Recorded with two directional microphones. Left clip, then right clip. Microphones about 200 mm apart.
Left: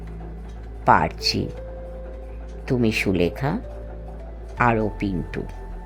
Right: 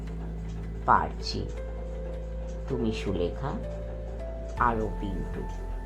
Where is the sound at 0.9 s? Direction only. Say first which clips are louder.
Left 7 dB; 60° left (ahead or behind).